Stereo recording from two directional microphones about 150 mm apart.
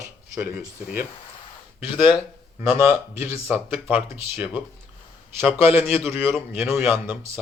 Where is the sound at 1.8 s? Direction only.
35° left (ahead or behind).